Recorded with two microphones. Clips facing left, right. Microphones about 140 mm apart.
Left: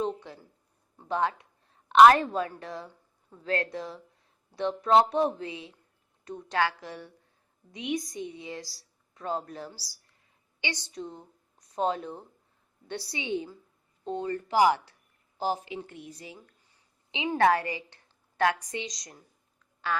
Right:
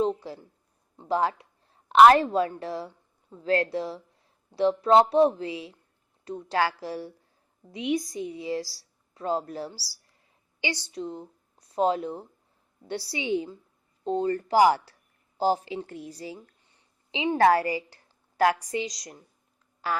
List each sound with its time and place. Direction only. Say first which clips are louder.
0.0 s a woman's voice: right 5 dB; 35° right (ahead or behind)